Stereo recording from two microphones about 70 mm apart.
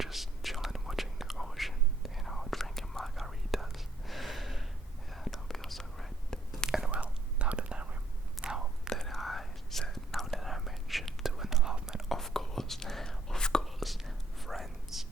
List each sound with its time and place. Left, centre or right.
0.0 s whispering: centre
6.7 s whispering: centre
8.9 s whispering: centre